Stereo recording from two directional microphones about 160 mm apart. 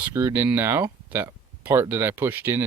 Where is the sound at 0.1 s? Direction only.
15° right (ahead or behind).